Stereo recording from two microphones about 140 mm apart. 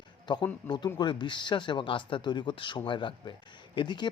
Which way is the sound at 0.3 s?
30° left (ahead or behind).